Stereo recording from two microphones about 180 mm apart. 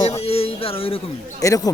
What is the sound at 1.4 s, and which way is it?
Speech, 20° left (ahead or behind).